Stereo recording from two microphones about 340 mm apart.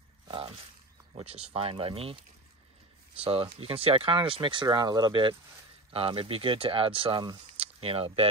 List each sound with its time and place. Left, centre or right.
0.3 s a sound: centre
1.2 s speech: centre
3.3 s speech: centre